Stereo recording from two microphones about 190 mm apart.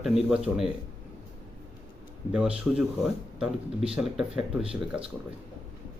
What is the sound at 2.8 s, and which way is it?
Speech, 5° right (ahead or behind).